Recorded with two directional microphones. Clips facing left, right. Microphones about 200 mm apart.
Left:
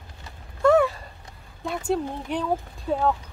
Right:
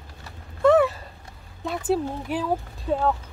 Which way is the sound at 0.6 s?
Centre (ahead or behind).